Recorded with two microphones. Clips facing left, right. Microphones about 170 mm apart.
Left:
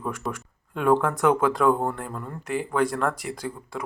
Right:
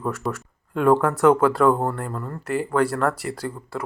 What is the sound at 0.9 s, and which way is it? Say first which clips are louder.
Speech: right 3 dB; 5° right (ahead or behind).